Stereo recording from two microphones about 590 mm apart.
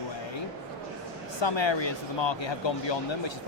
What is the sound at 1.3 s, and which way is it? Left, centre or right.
Speech, left.